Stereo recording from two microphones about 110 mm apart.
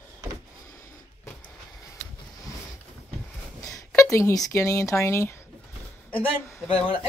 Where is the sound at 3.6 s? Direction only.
30° left (ahead or behind).